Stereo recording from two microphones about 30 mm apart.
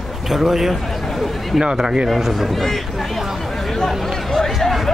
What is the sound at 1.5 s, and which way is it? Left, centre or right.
Speech, right.